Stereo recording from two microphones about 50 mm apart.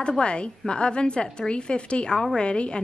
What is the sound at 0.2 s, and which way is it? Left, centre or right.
A woman's voice, left.